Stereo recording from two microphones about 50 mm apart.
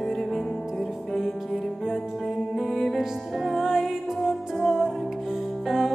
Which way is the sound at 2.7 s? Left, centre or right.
Centre.